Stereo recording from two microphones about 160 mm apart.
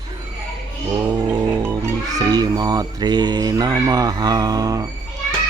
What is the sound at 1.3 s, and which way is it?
Music, 25° right (ahead or behind).